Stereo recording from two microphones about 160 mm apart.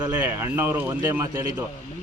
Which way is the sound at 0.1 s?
10° right (ahead or behind).